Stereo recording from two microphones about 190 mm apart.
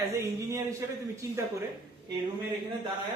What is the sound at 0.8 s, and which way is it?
Speech, 15° right (ahead or behind).